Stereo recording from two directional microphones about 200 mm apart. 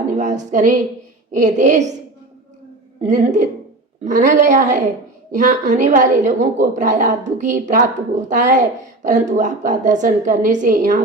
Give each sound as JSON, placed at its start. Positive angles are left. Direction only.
{"t": 0.2, "sound": "a woman's voice", "side_deg": -40}
{"t": 3.1, "sound": "a woman's voice", "side_deg": -40}